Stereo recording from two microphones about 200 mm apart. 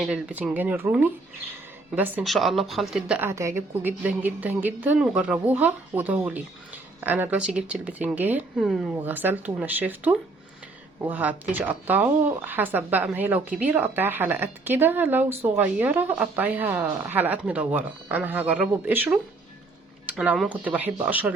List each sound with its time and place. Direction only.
0.0 s speech: 5° right (ahead or behind)